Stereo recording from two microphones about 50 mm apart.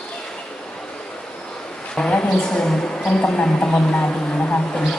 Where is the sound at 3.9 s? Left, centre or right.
Left.